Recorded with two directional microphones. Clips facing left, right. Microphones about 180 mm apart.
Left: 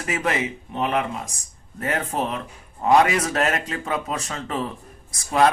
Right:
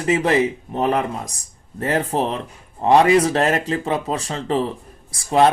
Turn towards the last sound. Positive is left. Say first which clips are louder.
# right 3 dB
turn(degrees=-30)  # may be behind; listen again after turning